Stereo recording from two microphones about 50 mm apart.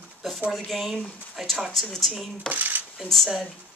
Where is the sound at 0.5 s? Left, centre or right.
Centre.